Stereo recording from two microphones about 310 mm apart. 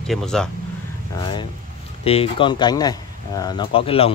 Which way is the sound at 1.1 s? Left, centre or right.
Centre.